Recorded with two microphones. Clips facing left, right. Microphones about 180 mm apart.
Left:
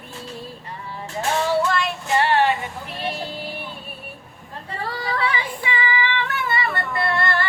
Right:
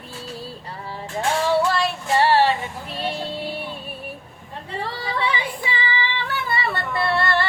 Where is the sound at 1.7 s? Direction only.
35° right (ahead or behind).